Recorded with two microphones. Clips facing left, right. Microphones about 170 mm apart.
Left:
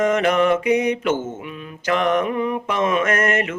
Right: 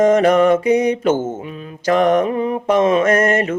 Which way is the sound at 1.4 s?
35° right (ahead or behind).